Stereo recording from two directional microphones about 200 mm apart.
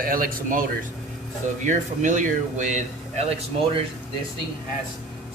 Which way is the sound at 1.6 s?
40° right (ahead or behind).